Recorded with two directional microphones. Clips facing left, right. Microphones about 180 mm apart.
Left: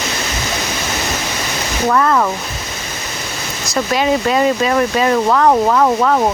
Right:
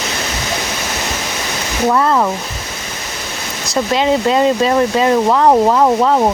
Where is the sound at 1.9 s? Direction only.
15° right (ahead or behind).